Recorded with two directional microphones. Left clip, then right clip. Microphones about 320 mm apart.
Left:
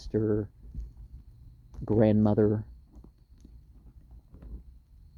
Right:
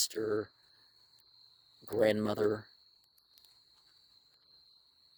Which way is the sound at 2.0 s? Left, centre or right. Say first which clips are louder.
Left 4 dB; right.